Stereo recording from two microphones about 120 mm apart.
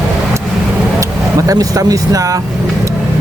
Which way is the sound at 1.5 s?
30° right (ahead or behind).